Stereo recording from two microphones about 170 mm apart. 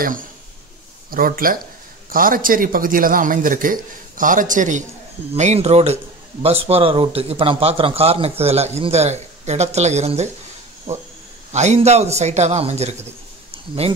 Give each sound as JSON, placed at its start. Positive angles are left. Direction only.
{"t": 0.0, "sound": "a man's voice", "side_deg": -55}